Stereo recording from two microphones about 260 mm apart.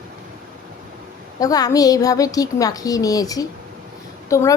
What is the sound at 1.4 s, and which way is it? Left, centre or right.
A woman's voice, centre.